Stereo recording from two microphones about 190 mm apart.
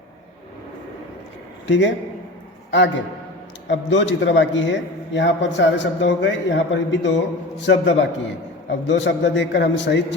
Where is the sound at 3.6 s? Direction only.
70° left (ahead or behind).